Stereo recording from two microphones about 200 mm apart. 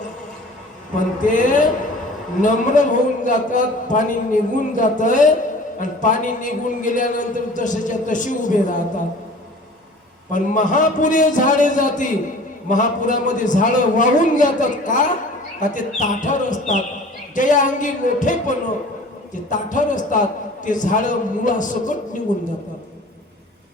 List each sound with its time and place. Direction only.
0.9 s a man's voice: 40° left (ahead or behind)
10.3 s a man's voice: 40° left (ahead or behind)